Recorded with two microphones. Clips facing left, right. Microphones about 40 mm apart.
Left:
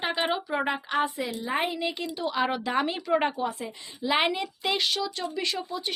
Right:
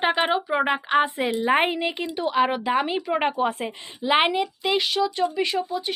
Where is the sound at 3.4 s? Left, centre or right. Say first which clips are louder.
Right 6 dB; right.